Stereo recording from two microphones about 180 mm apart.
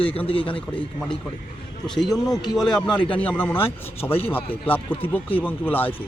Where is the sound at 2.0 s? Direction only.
Centre (ahead or behind).